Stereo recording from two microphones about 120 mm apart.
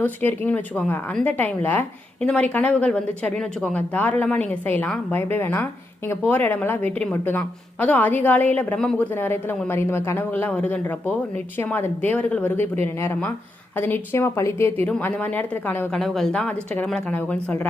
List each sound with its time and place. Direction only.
0.0 s speech: 15° left (ahead or behind)
15.9 s speech: centre (ahead or behind)